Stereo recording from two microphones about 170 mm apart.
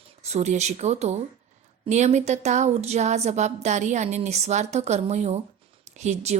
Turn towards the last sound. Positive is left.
turn(degrees=-40)  # may be behind; listen again after turning